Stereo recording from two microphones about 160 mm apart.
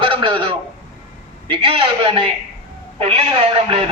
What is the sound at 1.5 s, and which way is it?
A man's voice, 35° right (ahead or behind).